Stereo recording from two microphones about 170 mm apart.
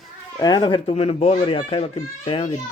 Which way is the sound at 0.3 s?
25° left (ahead or behind).